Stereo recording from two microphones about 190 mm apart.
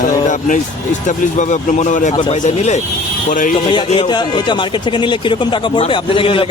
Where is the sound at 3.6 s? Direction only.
25° left (ahead or behind).